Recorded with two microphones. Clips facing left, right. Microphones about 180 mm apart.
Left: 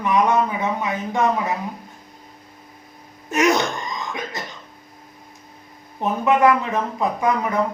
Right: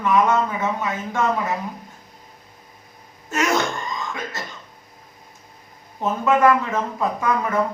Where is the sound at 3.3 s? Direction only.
20° left (ahead or behind).